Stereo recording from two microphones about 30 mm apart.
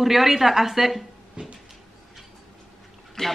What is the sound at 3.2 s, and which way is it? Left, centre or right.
Speech, left.